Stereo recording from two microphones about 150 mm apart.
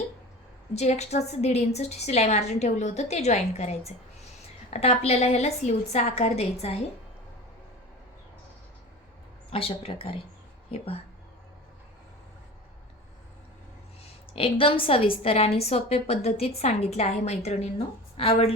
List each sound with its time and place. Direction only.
0.7 s a woman's voice: 45° left (ahead or behind)
9.5 s a woman's voice: 40° left (ahead or behind)
14.3 s a woman's voice: 35° left (ahead or behind)